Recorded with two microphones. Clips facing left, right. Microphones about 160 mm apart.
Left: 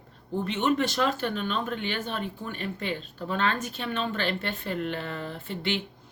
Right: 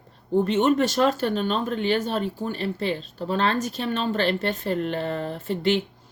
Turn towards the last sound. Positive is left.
turn(degrees=-40)  # may be behind; listen again after turning